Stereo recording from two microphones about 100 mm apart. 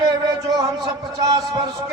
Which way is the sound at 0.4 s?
35° right (ahead or behind).